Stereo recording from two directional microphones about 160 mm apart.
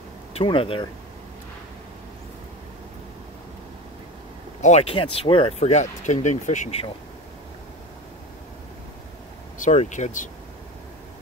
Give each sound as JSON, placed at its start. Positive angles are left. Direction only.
{"t": 0.3, "sound": "speech", "side_deg": 35}
{"t": 4.6, "sound": "speech", "side_deg": 45}
{"t": 9.6, "sound": "speech", "side_deg": 50}